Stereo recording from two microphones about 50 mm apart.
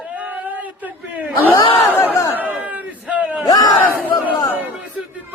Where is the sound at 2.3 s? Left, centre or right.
Right.